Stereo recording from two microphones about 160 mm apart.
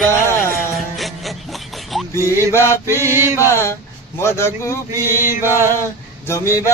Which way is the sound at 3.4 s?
15° left (ahead or behind).